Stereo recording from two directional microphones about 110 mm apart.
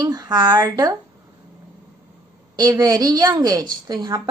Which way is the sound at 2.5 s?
35° right (ahead or behind).